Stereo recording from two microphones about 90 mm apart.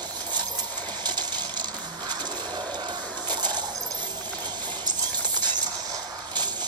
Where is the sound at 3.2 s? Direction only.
55° right (ahead or behind).